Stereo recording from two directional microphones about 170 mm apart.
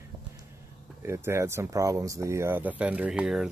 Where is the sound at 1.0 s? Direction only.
15° right (ahead or behind).